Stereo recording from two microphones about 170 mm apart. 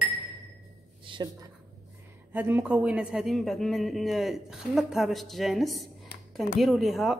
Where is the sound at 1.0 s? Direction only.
30° right (ahead or behind).